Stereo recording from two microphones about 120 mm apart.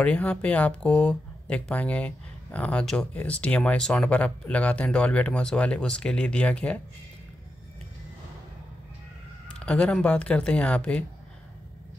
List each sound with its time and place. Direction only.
0.0 s speech: 10° left (ahead or behind)
9.5 s speech: 10° left (ahead or behind)